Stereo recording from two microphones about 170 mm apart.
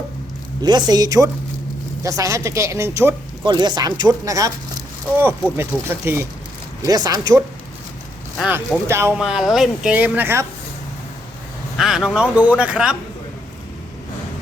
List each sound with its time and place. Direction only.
0.6 s speech: 25° right (ahead or behind)
3.4 s speech: 25° right (ahead or behind)
9.1 s speech: 5° right (ahead or behind)
11.8 s speech: 5° right (ahead or behind)